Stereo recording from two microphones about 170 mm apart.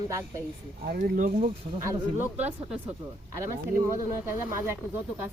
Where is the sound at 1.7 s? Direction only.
15° right (ahead or behind).